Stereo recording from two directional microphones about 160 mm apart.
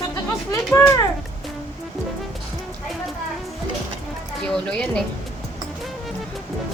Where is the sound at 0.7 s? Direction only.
15° left (ahead or behind).